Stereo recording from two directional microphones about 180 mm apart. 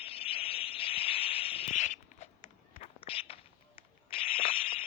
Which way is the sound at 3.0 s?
30° left (ahead or behind).